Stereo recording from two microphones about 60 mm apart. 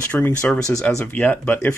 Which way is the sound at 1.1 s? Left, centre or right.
Left.